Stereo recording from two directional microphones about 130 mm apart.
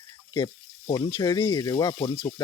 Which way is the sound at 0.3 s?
35° left (ahead or behind).